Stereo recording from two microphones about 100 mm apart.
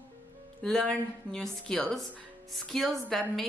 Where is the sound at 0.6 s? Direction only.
10° left (ahead or behind).